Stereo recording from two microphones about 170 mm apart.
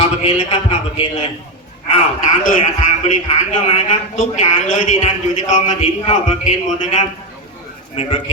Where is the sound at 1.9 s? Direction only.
50° left (ahead or behind).